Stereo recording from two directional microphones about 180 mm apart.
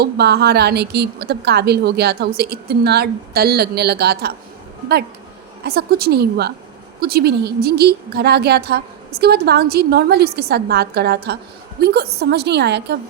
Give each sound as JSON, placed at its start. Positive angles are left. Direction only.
{"t": 0.0, "sound": "a woman's voice", "side_deg": -65}
{"t": 5.6, "sound": "a woman's voice", "side_deg": -60}